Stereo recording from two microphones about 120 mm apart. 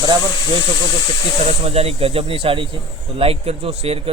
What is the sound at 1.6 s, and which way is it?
A man's voice, 55° right (ahead or behind).